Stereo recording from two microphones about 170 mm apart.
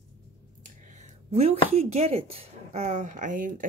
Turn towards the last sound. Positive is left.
turn(degrees=-50)  # may be behind; listen again after turning